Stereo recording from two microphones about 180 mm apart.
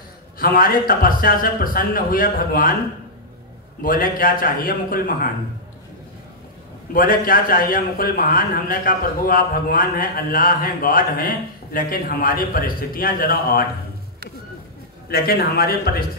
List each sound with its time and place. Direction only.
0.4 s a man's voice: 55° left (ahead or behind)
3.8 s a man's voice: 50° left (ahead or behind)
6.9 s a man's voice: 50° left (ahead or behind)
15.0 s a man's voice: 60° left (ahead or behind)